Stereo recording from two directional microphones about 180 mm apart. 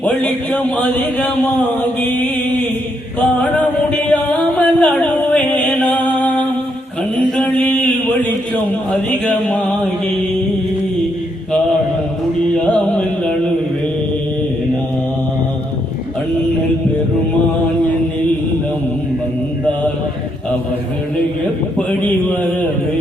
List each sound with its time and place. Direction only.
0.0 s speech: 10° left (ahead or behind)
3.2 s a sound: 5° left (ahead or behind)
6.1 s music: 10° left (ahead or behind)
7.2 s mantra: 5° left (ahead or behind)
8.9 s speech: 5° left (ahead or behind)
12.5 s music: 5° left (ahead or behind)
21.8 s a man's voice: 10° left (ahead or behind)